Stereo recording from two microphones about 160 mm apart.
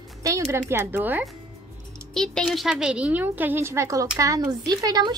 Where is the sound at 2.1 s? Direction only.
5° left (ahead or behind); by 5.2 s 25° right (ahead or behind).